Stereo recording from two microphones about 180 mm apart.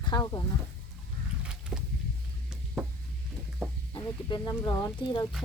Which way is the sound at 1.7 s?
15° right (ahead or behind).